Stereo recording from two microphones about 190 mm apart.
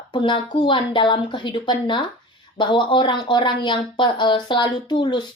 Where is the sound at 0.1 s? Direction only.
25° left (ahead or behind).